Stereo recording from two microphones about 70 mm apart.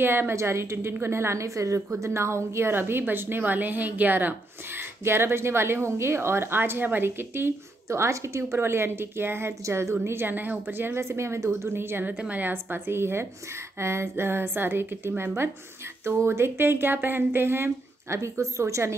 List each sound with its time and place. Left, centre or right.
0.0 s a woman's voice: right